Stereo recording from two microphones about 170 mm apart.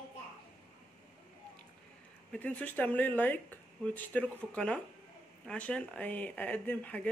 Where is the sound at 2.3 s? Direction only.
10° left (ahead or behind).